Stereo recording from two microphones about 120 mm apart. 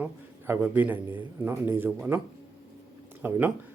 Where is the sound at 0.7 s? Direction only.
15° right (ahead or behind).